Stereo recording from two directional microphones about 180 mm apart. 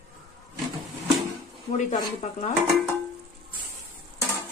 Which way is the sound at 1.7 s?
40° left (ahead or behind).